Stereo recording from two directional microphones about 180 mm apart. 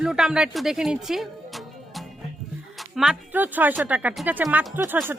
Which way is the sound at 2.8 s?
Centre (ahead or behind).